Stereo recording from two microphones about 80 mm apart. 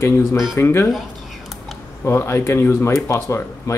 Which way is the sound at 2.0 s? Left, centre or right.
Left.